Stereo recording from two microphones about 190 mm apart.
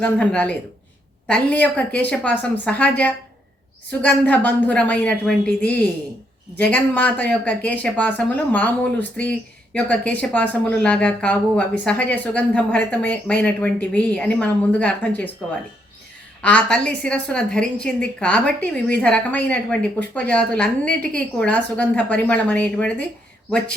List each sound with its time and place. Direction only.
0.0 s a woman's voice: 5° left (ahead or behind)
4.0 s a woman's voice: 10° left (ahead or behind)
16.4 s a woman's voice: 5° left (ahead or behind)